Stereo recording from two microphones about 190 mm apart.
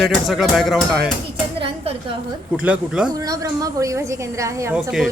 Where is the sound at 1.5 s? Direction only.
30° right (ahead or behind).